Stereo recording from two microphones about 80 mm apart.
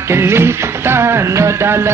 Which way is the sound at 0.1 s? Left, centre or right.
Right.